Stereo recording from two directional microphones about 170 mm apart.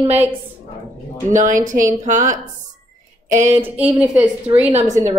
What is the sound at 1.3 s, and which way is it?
A woman's voice, 50° right (ahead or behind).